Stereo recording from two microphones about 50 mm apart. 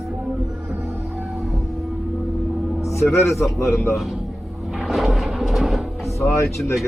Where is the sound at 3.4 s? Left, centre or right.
Left.